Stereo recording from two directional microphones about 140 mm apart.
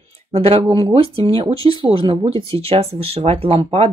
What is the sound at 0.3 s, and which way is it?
Speech, 45° right (ahead or behind).